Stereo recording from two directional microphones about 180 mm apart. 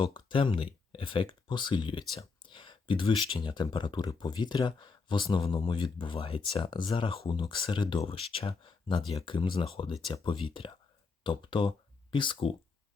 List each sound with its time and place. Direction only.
0.0 s speech: 30° left (ahead or behind)